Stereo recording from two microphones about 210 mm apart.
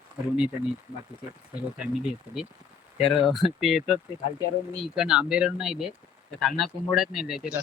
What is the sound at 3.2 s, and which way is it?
Speech, centre (ahead or behind).